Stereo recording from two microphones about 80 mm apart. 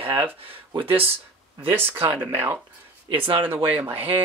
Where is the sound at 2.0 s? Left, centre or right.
Right.